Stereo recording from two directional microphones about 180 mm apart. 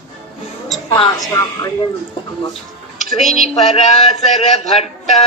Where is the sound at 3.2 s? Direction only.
Centre (ahead or behind).